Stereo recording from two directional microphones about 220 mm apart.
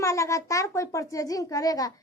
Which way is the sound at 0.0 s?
15° left (ahead or behind).